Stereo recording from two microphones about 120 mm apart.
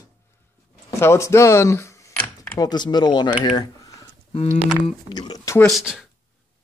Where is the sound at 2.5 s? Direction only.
35° left (ahead or behind).